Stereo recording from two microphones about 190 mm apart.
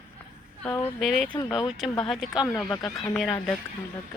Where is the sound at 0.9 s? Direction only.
Centre (ahead or behind).